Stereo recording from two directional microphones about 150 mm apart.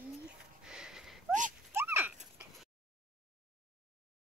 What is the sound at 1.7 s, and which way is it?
Horse, 15° right (ahead or behind).